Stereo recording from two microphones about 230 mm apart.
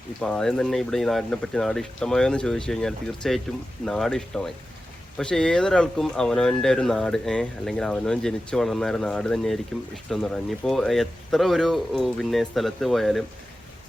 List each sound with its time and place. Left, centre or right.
0.2 s speech: centre